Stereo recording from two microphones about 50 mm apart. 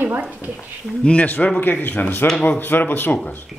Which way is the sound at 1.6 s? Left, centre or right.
Left.